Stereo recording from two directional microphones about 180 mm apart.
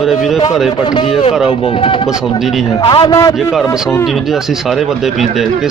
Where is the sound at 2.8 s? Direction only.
30° left (ahead or behind).